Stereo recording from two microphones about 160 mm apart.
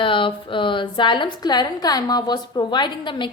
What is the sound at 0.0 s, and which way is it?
A woman's voice, 30° left (ahead or behind).